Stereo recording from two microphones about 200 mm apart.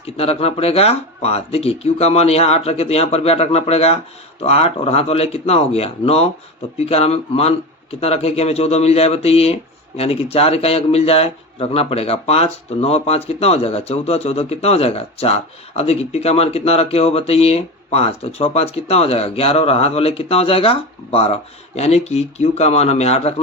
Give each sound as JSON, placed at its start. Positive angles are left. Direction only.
{"t": 0.0, "sound": "speech", "side_deg": 30}